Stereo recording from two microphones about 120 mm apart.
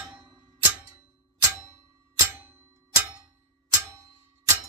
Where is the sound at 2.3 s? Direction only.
15° right (ahead or behind).